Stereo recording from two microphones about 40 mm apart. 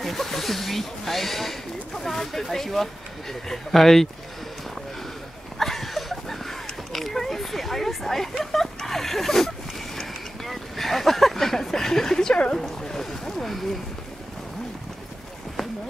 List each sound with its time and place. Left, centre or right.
0.0 s speech: centre
5.6 s a sound: centre
12.8 s speech: centre